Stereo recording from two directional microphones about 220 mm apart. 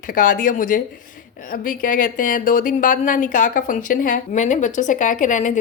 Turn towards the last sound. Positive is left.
turn(degrees=35)  # may be behind; listen again after turning